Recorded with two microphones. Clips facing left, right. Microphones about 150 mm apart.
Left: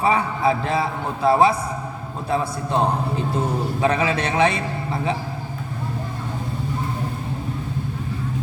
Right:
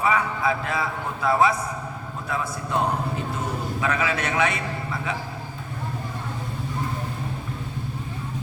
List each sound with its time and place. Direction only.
0.0 s a man's voice: 30° left (ahead or behind)